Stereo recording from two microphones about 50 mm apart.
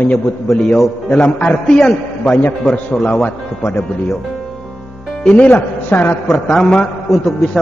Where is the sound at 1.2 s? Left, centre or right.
Left.